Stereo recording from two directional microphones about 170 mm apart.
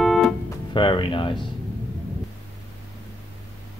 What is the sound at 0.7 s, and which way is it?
Music, 30° left (ahead or behind).